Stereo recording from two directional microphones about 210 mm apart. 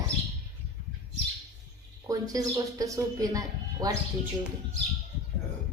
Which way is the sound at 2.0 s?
15° right (ahead or behind).